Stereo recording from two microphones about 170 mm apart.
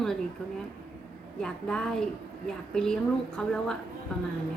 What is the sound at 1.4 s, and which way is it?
A woman's voice, 5° left (ahead or behind).